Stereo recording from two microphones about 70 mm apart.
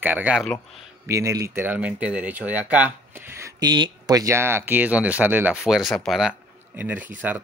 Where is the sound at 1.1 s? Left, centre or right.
Right.